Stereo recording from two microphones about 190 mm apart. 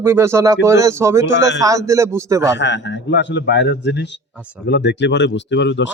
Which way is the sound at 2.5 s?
70° left (ahead or behind).